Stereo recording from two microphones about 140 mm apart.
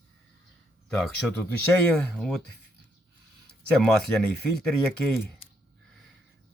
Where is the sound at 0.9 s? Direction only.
Centre (ahead or behind).